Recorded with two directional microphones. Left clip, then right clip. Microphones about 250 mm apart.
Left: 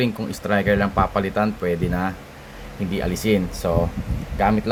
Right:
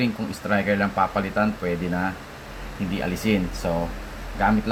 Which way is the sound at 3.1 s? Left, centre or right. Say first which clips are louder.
Left 4 dB; left.